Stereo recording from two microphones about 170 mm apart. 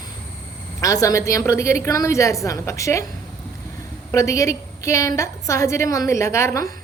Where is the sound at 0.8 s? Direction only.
20° left (ahead or behind).